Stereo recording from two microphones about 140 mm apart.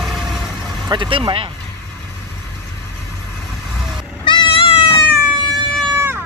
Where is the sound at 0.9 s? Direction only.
35° right (ahead or behind).